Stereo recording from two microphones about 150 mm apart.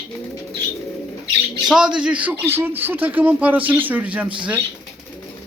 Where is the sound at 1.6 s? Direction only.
5° right (ahead or behind).